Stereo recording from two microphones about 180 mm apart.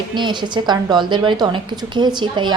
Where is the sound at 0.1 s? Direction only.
25° right (ahead or behind).